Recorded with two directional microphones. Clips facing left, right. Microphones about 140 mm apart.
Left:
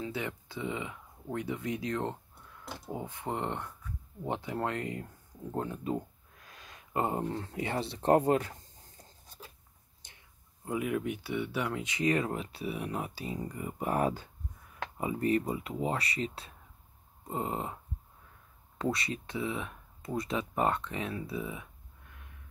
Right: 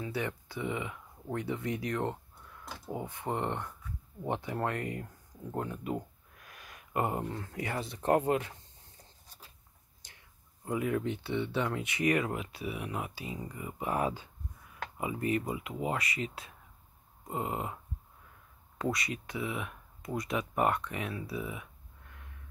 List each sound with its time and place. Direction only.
0.0 s speech: 20° left (ahead or behind)
3.3 s speech: 15° left (ahead or behind); by 8.5 s 40° left (ahead or behind)
10.6 s speech: 20° left (ahead or behind)
18.8 s speech: 30° left (ahead or behind)